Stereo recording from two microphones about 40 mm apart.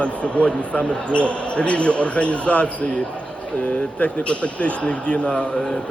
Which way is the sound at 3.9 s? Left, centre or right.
Left.